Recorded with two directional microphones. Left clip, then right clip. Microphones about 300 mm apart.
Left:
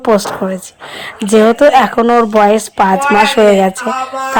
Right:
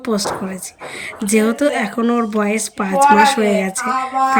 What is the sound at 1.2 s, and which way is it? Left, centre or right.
Speech, centre.